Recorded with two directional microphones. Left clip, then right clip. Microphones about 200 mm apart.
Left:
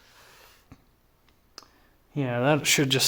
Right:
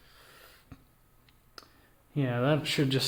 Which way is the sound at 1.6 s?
35° left (ahead or behind).